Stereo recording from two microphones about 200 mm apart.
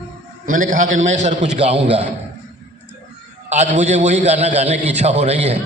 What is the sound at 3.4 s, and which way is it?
A man's voice, 35° right (ahead or behind).